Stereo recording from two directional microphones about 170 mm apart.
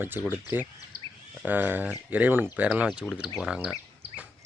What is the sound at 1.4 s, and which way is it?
Speech, 10° right (ahead or behind).